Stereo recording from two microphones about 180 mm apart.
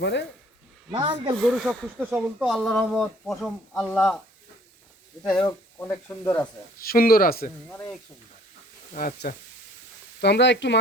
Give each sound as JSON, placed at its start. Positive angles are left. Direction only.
{"t": 0.0, "sound": "speech", "side_deg": 75}
{"t": 0.9, "sound": "speech", "side_deg": -25}
{"t": 1.4, "sound": "speech", "side_deg": 0}
{"t": 5.4, "sound": "speech", "side_deg": 15}
{"t": 6.7, "sound": "speech", "side_deg": 55}
{"t": 8.9, "sound": "speech", "side_deg": 50}
{"t": 10.2, "sound": "speech", "side_deg": 70}